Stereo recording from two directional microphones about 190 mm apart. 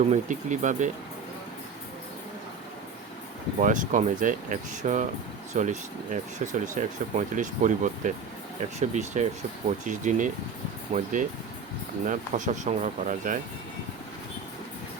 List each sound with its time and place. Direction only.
0.1 s speech: 40° right (ahead or behind)
3.6 s speech: 40° right (ahead or behind)